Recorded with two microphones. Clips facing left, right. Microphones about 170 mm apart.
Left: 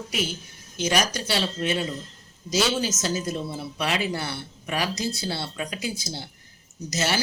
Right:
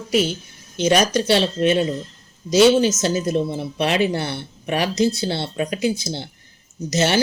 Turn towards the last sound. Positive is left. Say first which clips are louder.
# right 7 dB
turn(degrees=-25)  # may be behind; listen again after turning